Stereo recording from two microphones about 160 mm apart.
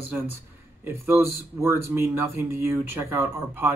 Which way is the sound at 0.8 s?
15° right (ahead or behind).